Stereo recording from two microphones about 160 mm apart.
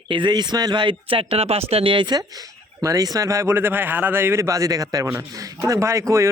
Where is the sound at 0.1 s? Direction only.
30° right (ahead or behind).